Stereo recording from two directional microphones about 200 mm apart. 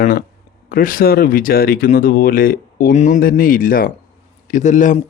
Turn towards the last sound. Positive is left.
turn(degrees=40)  # may be behind; listen again after turning